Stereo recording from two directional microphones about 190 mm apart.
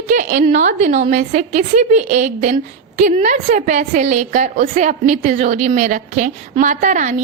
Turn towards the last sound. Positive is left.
turn(degrees=-40)  # may be behind; listen again after turning